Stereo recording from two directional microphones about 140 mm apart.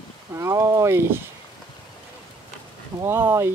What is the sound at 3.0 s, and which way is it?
Speech, 15° right (ahead or behind).